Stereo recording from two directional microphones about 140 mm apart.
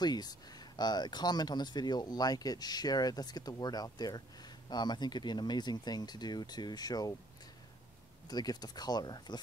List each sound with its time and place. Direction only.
0.0 s speech: 30° left (ahead or behind)
8.3 s speech: 30° left (ahead or behind)